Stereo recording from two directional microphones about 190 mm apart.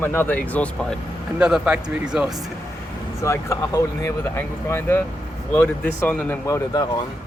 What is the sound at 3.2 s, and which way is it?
Speech, 15° left (ahead or behind).